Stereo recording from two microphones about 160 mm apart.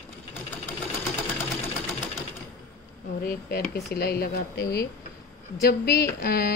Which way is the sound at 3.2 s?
65° left (ahead or behind).